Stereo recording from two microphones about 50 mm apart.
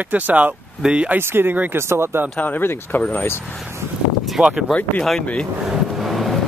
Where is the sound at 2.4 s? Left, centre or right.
Left.